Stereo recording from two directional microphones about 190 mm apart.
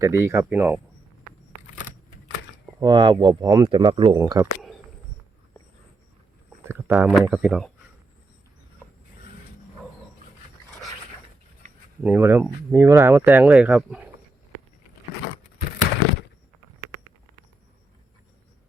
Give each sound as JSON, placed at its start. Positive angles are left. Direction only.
{"t": 0.0, "sound": "speech", "side_deg": -15}
{"t": 2.8, "sound": "speech", "side_deg": -25}
{"t": 6.7, "sound": "speech", "side_deg": -10}
{"t": 12.0, "sound": "speech", "side_deg": -10}